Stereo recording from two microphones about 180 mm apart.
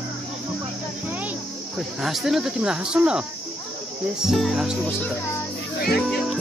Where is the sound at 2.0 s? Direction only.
Centre (ahead or behind).